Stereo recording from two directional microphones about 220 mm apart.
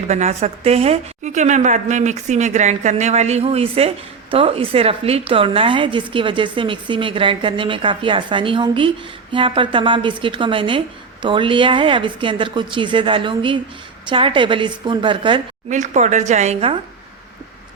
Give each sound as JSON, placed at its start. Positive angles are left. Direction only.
{"t": 0.1, "sound": "a woman's voice", "side_deg": -30}
{"t": 15.7, "sound": "a woman's voice", "side_deg": -35}